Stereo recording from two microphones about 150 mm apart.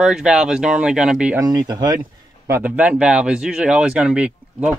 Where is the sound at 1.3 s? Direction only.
25° right (ahead or behind).